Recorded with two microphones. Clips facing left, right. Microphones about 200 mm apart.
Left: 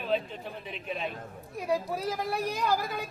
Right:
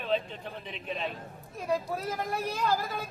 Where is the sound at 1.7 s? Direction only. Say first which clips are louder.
Left 1 dB; 15° left (ahead or behind).